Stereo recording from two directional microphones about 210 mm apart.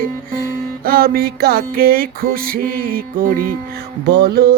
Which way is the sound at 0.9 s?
45° right (ahead or behind).